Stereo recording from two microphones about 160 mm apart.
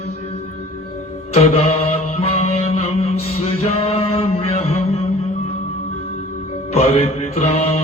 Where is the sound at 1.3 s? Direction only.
40° left (ahead or behind).